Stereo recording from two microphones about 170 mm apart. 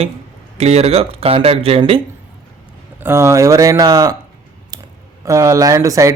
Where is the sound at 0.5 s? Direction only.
40° right (ahead or behind).